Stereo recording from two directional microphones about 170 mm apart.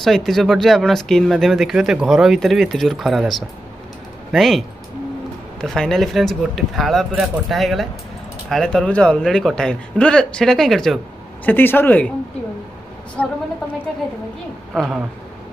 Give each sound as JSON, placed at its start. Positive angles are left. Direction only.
{"t": 0.0, "sound": "speech", "side_deg": 0}
{"t": 11.4, "sound": "speech", "side_deg": 10}
{"t": 13.2, "sound": "speech", "side_deg": 5}
{"t": 14.7, "sound": "speech", "side_deg": -5}